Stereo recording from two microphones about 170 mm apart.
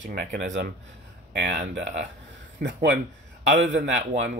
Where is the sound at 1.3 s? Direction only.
50° right (ahead or behind).